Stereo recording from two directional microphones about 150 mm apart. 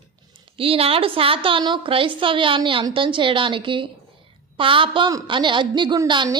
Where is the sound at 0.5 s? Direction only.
40° right (ahead or behind).